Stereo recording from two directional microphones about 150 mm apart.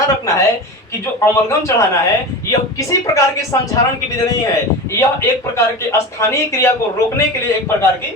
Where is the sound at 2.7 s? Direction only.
20° left (ahead or behind).